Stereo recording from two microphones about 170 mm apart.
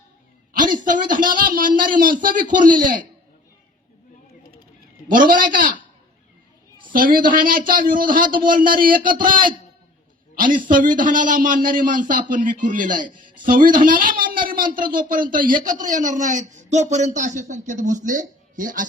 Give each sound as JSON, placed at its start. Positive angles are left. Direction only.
{"t": 0.6, "sound": "a man's voice", "side_deg": -50}
{"t": 5.0, "sound": "a man's voice", "side_deg": -50}
{"t": 6.9, "sound": "a man's voice", "side_deg": -55}